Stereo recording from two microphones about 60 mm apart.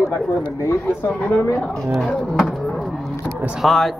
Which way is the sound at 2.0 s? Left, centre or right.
Centre.